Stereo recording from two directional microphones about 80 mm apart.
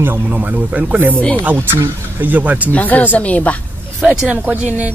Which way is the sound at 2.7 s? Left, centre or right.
Left.